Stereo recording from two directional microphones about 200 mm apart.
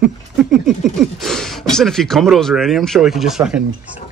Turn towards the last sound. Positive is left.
turn(degrees=-5)  # may be behind; listen again after turning